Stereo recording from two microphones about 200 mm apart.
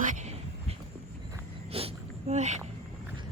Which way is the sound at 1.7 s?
30° right (ahead or behind).